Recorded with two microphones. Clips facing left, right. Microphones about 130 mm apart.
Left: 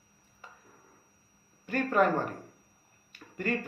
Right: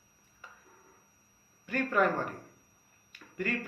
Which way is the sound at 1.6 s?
35° left (ahead or behind).